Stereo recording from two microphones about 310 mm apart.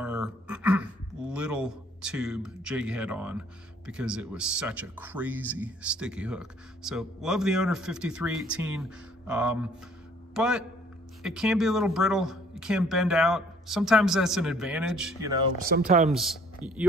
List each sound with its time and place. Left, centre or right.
0.0 s a man's voice: centre
15.7 s speech: right
16.1 s speech: centre